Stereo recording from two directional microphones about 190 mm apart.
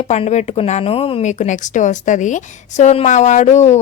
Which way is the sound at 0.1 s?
35° left (ahead or behind).